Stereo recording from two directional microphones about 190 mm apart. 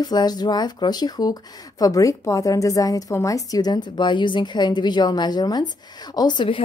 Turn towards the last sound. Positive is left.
turn(degrees=25)  # may be behind; listen again after turning